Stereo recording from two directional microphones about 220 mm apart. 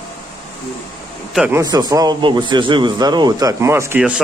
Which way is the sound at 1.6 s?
15° right (ahead or behind).